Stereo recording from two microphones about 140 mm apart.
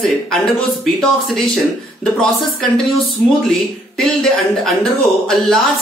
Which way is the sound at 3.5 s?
5° left (ahead or behind).